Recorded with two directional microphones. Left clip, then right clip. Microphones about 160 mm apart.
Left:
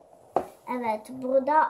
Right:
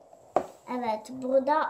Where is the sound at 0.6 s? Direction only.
10° left (ahead or behind).